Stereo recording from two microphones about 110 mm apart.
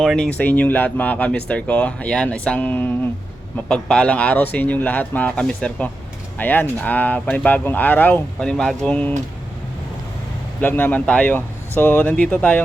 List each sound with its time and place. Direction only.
0.0 s speech: 5° left (ahead or behind)
3.7 s speech: 5° left (ahead or behind)
6.4 s speech: 15° left (ahead or behind)
10.6 s speech: 15° left (ahead or behind)